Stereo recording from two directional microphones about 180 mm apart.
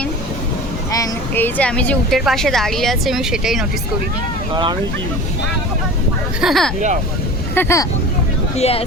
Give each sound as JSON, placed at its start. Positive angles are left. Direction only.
{"t": 0.9, "sound": "speech", "side_deg": 20}
{"t": 4.5, "sound": "speech", "side_deg": -25}
{"t": 6.4, "sound": "speech", "side_deg": 0}
{"t": 6.7, "sound": "speech", "side_deg": -40}
{"t": 7.5, "sound": "speech", "side_deg": 15}
{"t": 8.5, "sound": "speech", "side_deg": 35}